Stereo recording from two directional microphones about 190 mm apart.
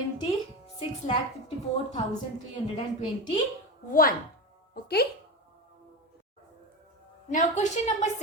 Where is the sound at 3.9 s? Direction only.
45° left (ahead or behind).